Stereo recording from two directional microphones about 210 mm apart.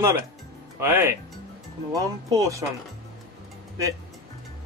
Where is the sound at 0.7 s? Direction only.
10° right (ahead or behind).